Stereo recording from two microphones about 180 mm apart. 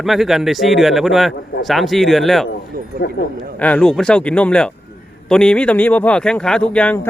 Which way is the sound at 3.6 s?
5° left (ahead or behind).